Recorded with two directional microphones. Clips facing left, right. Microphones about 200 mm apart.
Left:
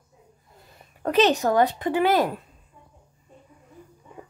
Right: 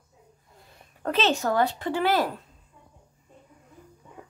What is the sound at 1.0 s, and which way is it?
A woman's voice, 15° left (ahead or behind).